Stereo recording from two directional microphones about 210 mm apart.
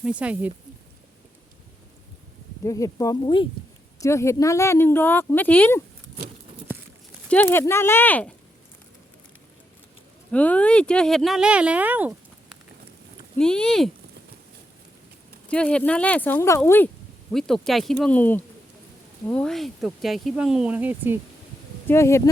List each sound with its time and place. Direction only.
0.0 s speech: 5° right (ahead or behind)
2.6 s speech: 15° left (ahead or behind)
7.3 s speech: 10° left (ahead or behind)
10.3 s speech: 5° left (ahead or behind)
13.4 s speech: 5° left (ahead or behind)
15.4 s speech: 5° left (ahead or behind)
21.8 s speech: 15° left (ahead or behind)